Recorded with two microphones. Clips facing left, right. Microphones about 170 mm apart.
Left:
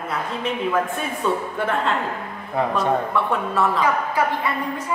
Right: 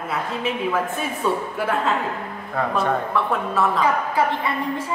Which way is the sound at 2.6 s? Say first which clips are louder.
Left 2 dB; 20° left (ahead or behind).